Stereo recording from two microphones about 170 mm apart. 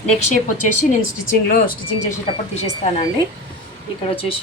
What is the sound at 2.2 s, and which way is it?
Speech, 35° left (ahead or behind).